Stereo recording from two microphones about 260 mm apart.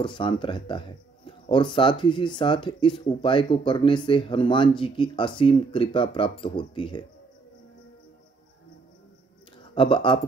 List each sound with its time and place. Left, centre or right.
0.0 s speech: centre
9.8 s speech: centre